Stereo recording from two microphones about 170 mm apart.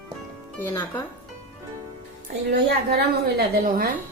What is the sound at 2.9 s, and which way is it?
A woman's voice, 70° right (ahead or behind).